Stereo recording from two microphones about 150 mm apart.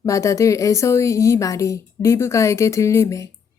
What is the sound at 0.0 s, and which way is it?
Speech, 20° left (ahead or behind).